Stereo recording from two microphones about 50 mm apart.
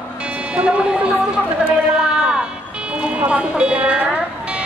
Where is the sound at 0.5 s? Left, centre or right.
Right.